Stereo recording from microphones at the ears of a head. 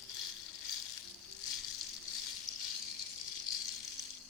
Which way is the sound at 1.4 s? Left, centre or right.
Left.